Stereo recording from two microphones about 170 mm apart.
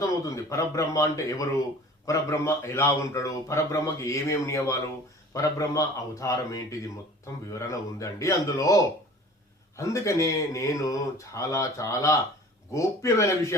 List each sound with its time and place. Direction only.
0.0 s a man's voice: 20° left (ahead or behind)